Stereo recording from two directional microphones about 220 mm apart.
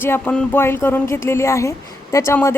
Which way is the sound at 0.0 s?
5° left (ahead or behind).